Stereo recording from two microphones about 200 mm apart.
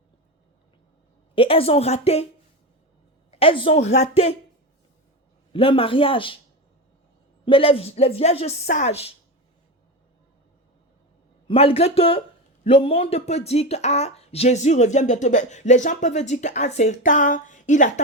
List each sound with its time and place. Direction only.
1.4 s speech: 30° left (ahead or behind)
3.3 s speech: 25° left (ahead or behind)
5.5 s speech: 25° left (ahead or behind)
7.4 s speech: 25° left (ahead or behind)
11.4 s speech: 30° left (ahead or behind)